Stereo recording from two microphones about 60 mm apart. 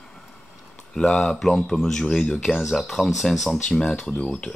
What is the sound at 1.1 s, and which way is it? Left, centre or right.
Speech, centre.